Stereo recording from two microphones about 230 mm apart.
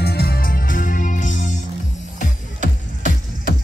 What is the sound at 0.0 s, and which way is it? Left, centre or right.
Music, left.